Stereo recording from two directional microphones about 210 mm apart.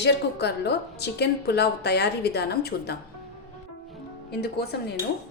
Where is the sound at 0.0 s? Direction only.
55° left (ahead or behind).